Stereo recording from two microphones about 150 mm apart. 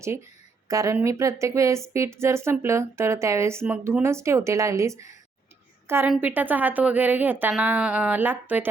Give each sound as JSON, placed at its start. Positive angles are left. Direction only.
{"t": 0.7, "sound": "a woman's voice", "side_deg": -20}
{"t": 6.1, "sound": "a woman's voice", "side_deg": -10}